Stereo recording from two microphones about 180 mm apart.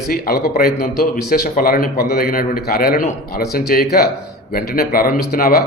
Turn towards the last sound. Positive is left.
turn(degrees=55)  # may be behind; listen again after turning